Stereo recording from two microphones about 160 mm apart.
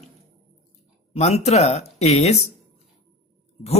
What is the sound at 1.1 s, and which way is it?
Speech, 40° left (ahead or behind).